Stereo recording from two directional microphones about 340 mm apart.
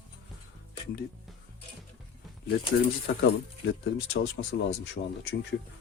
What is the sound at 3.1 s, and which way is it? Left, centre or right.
Speech, left.